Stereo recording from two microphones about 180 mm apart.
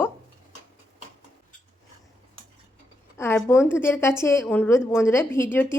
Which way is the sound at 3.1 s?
15° left (ahead or behind).